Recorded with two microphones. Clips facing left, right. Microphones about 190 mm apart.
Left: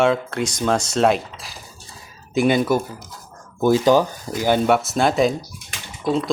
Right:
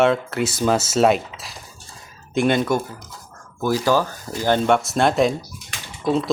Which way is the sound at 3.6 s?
20° left (ahead or behind).